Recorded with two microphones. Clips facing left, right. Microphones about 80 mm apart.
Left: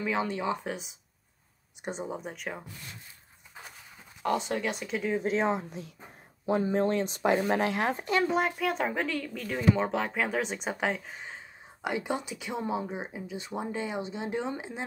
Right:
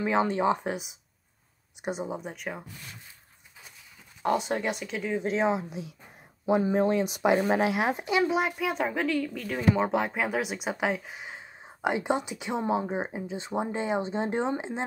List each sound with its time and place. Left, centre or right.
0.0 s speech: right
1.9 s speech: centre
4.6 s speech: centre
9.6 s speech: centre
11.8 s speech: right